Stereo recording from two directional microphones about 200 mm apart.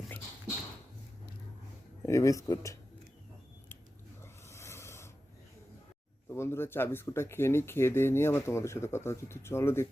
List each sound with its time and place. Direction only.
2.0 s speech: 15° left (ahead or behind)
4.2 s rub: 15° left (ahead or behind)
6.2 s speech: 10° left (ahead or behind)